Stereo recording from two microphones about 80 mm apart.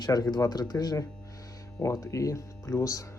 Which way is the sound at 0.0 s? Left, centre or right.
Left.